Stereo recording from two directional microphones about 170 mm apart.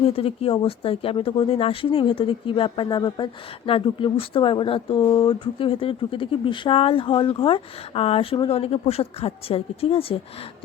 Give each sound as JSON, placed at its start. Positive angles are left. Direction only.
{"t": 0.2, "sound": "speech", "side_deg": 35}